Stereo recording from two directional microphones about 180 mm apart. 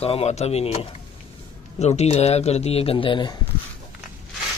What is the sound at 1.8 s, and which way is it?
Speech, 35° left (ahead or behind).